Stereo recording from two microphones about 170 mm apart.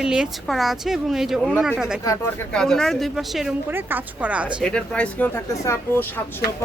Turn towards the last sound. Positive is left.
turn(degrees=10)  # may be behind; listen again after turning